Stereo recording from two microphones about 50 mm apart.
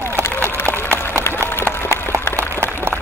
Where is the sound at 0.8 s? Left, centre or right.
Left.